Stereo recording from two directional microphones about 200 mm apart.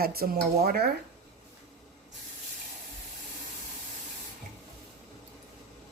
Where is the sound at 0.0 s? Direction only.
50° right (ahead or behind).